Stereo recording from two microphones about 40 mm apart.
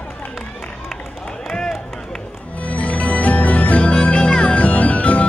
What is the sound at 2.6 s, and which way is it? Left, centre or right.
Music, left.